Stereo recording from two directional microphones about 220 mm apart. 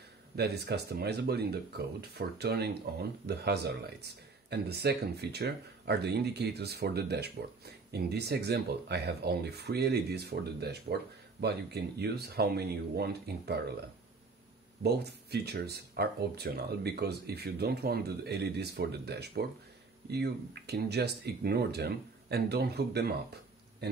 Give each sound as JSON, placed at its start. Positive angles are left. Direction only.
{"t": 0.4, "sound": "speech", "side_deg": -50}
{"t": 14.8, "sound": "speech", "side_deg": -50}